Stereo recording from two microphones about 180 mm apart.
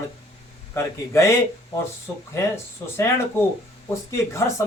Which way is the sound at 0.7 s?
15° left (ahead or behind).